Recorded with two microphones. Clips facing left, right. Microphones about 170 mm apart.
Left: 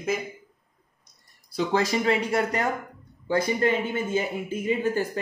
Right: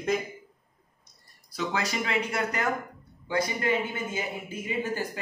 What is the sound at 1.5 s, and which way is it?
Speech, 35° left (ahead or behind).